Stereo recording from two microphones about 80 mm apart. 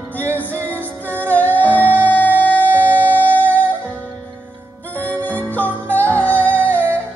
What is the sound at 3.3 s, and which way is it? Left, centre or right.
Music, left.